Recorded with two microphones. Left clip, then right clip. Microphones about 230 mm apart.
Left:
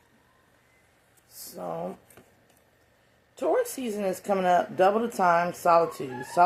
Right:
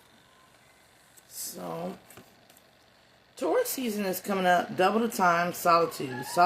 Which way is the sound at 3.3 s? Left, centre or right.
Right.